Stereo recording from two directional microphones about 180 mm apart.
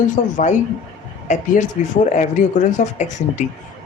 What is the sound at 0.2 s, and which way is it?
Speech, 45° left (ahead or behind).